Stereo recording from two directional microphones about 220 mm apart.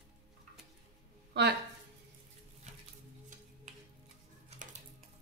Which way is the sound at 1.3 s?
50° right (ahead or behind).